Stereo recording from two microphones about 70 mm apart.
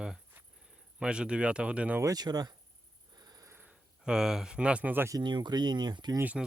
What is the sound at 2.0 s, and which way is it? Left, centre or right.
Speech, right.